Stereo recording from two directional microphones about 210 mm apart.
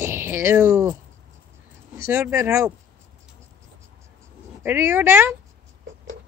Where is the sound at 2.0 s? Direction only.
15° right (ahead or behind).